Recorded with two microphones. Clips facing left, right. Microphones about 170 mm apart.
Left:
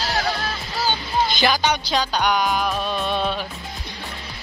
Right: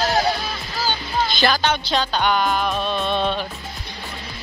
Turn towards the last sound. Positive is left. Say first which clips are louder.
# right 2 dB
turn(degrees=5)  # may be behind; listen again after turning